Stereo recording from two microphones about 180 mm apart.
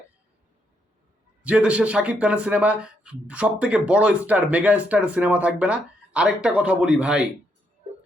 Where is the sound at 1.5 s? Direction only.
5° right (ahead or behind).